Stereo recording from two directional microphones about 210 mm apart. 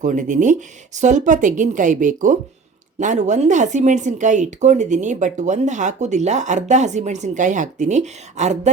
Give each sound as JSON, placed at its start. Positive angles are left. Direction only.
{"t": 0.0, "sound": "speech", "side_deg": -35}